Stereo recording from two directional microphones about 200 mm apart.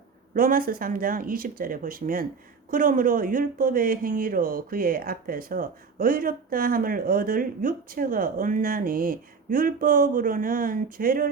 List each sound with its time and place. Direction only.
0.3 s speech: 45° right (ahead or behind)